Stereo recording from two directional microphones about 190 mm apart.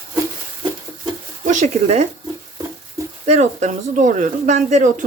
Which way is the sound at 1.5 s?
40° right (ahead or behind).